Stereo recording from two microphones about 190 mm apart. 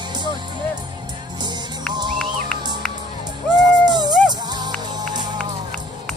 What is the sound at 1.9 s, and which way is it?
Music, 25° right (ahead or behind).